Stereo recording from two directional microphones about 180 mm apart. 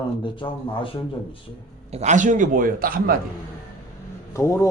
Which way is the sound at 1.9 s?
40° right (ahead or behind).